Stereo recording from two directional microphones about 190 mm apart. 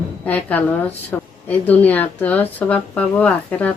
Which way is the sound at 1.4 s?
10° left (ahead or behind).